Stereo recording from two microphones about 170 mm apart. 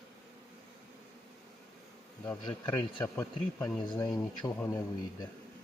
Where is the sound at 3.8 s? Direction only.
25° left (ahead or behind).